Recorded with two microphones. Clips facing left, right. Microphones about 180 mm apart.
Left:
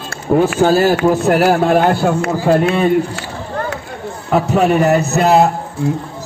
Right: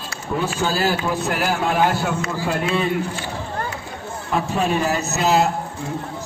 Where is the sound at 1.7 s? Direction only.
55° left (ahead or behind); by 2.7 s 40° left (ahead or behind).